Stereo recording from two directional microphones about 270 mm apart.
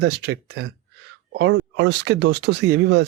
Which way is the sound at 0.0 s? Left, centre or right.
Right.